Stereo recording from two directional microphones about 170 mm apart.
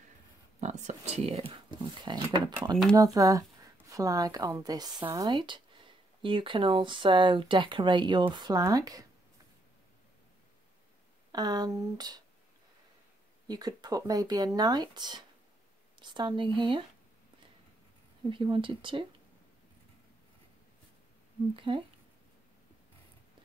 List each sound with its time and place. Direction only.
0.6 s a sound: 45° right (ahead or behind); by 2.2 s 25° right (ahead or behind)
2.2 s a woman's voice: 20° right (ahead or behind)
11.3 s a woman's voice: 25° right (ahead or behind)
13.5 s a woman's voice: 25° right (ahead or behind)
18.3 s speech: 30° right (ahead or behind)
21.5 s a woman's voice: 30° right (ahead or behind)